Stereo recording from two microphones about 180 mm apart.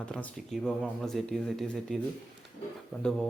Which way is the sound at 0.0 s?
5° left (ahead or behind).